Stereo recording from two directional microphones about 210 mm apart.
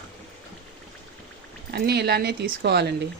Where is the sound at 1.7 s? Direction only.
50° right (ahead or behind).